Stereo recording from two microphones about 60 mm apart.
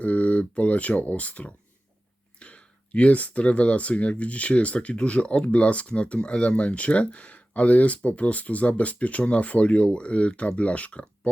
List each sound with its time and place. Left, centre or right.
0.0 s speech: left